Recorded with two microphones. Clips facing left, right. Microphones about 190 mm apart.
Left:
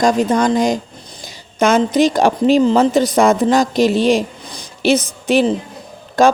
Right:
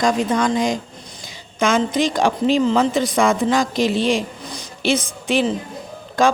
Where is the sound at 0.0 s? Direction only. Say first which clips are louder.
Left 4 dB; 40° left (ahead or behind).